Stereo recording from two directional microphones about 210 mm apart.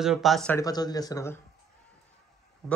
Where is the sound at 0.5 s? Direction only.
20° left (ahead or behind).